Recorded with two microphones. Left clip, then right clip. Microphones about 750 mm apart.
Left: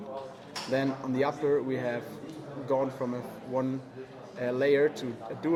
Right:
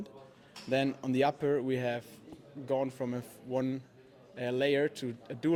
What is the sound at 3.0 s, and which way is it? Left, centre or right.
Speech, right.